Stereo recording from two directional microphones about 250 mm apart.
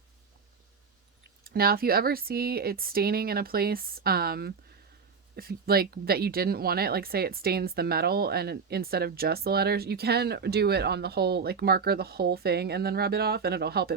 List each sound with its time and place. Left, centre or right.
1.5 s speech: right